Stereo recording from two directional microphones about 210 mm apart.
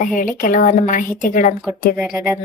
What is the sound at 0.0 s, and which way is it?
Speech, 40° left (ahead or behind).